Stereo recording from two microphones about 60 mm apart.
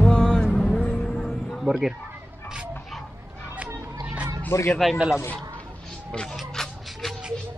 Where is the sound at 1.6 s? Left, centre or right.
Centre.